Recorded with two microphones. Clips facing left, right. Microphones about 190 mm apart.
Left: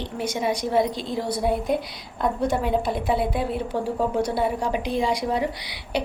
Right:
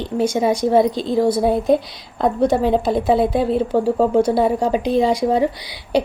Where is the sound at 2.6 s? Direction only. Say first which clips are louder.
Right 7 dB; 30° right (ahead or behind).